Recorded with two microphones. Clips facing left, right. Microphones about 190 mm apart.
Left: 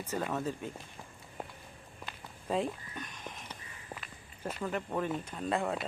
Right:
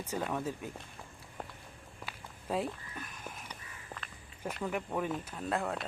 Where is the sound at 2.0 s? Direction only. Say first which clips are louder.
Left 2 dB; 5° right (ahead or behind).